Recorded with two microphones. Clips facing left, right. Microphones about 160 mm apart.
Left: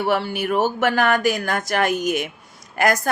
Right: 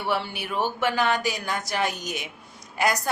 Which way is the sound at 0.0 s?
45° left (ahead or behind).